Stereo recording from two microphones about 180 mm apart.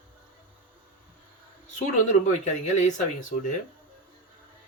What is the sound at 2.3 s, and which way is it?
Speech, 40° left (ahead or behind).